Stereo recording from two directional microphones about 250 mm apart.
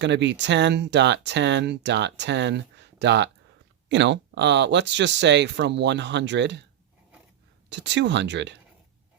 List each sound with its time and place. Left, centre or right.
0.0 s speech: right
7.7 s speech: right